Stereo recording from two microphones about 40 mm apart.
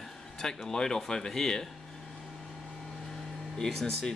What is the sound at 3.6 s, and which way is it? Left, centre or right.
Speech, centre.